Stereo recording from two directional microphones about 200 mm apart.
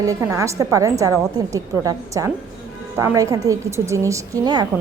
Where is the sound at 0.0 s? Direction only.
15° right (ahead or behind).